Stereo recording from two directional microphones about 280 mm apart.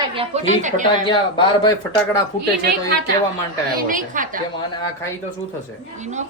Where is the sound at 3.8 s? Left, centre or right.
Right.